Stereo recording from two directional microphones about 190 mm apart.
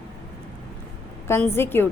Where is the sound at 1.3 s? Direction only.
10° left (ahead or behind).